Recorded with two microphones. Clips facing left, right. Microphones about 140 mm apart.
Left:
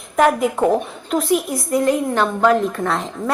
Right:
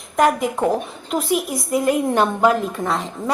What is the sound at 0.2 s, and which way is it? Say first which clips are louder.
A woman's voice: left 2 dB; centre (ahead or behind).